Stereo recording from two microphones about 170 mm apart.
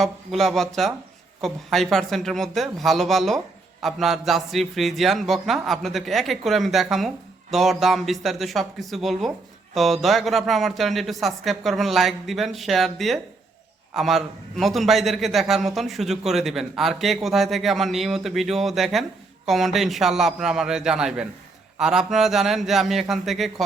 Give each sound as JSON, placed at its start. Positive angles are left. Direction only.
{"t": 0.0, "sound": "speech", "side_deg": 0}